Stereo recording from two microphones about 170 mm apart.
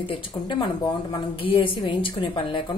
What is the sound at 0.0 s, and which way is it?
A woman's voice, 30° left (ahead or behind).